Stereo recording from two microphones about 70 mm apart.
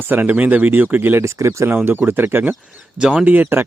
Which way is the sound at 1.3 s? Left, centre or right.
Right.